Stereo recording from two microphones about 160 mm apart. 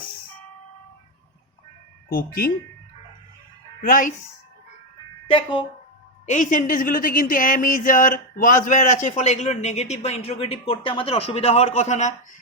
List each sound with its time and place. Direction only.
2.0 s speech: 65° left (ahead or behind)
3.8 s speech: 60° left (ahead or behind)
5.3 s speech: 30° left (ahead or behind)
6.2 s speech: 50° left (ahead or behind)